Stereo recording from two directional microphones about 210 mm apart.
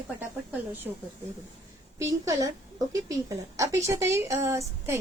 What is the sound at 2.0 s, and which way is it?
Speech, 15° right (ahead or behind).